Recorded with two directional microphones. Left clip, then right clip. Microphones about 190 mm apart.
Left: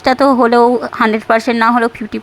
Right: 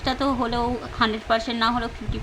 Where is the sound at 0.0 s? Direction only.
40° left (ahead or behind).